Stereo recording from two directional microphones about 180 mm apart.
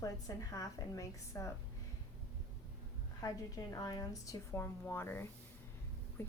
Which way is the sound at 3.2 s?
20° left (ahead or behind).